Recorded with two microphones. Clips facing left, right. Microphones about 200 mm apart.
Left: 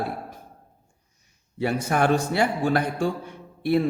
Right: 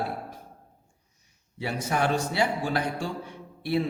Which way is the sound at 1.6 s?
50° left (ahead or behind).